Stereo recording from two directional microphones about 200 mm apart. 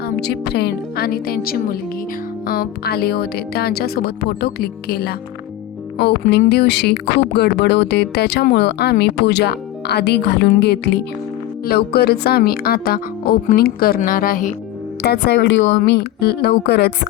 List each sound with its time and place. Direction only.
0.0 s speech: 55° left (ahead or behind)
15.0 s speech: 55° left (ahead or behind)
15.8 s speech: 50° left (ahead or behind)